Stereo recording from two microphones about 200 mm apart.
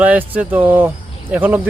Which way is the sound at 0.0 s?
5° right (ahead or behind).